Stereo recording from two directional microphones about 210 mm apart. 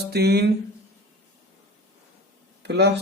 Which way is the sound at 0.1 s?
50° right (ahead or behind).